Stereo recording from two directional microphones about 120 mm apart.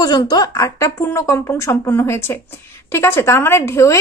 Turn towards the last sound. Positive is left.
turn(degrees=25)  # may be behind; listen again after turning